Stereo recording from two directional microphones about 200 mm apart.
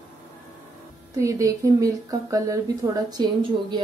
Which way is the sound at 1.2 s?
15° right (ahead or behind).